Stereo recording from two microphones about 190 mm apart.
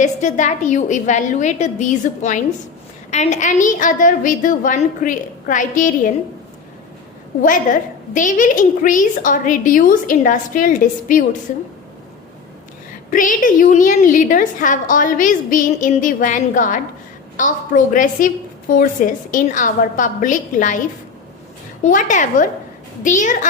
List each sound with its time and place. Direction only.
0.0 s a woman's voice: 40° left (ahead or behind)
7.4 s a woman's voice: 45° left (ahead or behind)
13.1 s a woman's voice: 45° left (ahead or behind)
21.8 s a woman's voice: 40° left (ahead or behind)